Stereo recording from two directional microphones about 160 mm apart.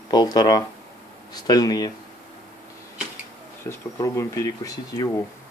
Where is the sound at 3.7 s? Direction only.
20° left (ahead or behind).